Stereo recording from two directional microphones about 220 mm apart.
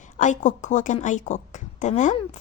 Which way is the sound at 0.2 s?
35° left (ahead or behind).